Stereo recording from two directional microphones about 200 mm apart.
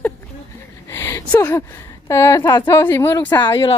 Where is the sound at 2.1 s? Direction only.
15° left (ahead or behind).